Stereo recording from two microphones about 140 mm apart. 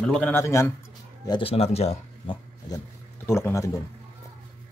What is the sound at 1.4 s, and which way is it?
Speech, 45° left (ahead or behind).